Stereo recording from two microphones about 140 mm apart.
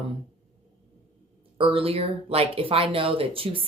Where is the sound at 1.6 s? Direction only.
40° right (ahead or behind).